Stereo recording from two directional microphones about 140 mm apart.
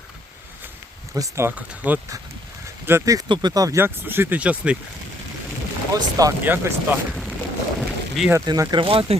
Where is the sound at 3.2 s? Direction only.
35° right (ahead or behind); by 4.8 s 10° right (ahead or behind).